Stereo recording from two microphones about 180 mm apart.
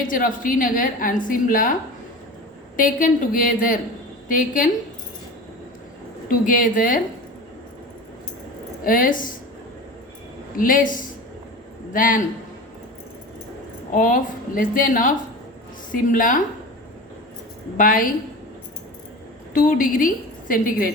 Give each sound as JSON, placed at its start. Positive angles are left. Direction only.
{"t": 0.1, "sound": "a woman's voice", "side_deg": 50}
{"t": 2.7, "sound": "a woman's voice", "side_deg": 50}
{"t": 6.2, "sound": "a woman's voice", "side_deg": 50}
{"t": 8.8, "sound": "a woman's voice", "side_deg": 50}
{"t": 10.6, "sound": "a woman's voice", "side_deg": 50}
{"t": 13.9, "sound": "a woman's voice", "side_deg": 50}
{"t": 17.7, "sound": "a woman's voice", "side_deg": 50}
{"t": 19.5, "sound": "a woman's voice", "side_deg": 50}